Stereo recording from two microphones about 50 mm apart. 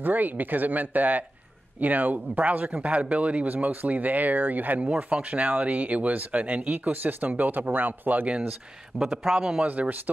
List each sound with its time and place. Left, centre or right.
0.0 s speech: right
9.0 s a man's voice: centre
9.6 s speech: right